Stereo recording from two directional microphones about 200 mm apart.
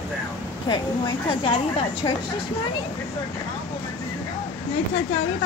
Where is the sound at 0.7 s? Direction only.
25° left (ahead or behind).